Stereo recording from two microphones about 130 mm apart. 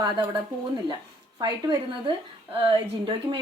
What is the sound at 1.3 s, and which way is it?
Speech, 35° right (ahead or behind).